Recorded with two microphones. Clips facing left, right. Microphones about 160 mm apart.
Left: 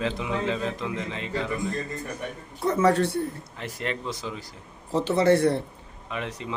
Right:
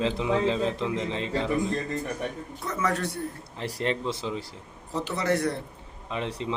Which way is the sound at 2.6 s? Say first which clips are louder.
Left 7 dB; 30° left (ahead or behind).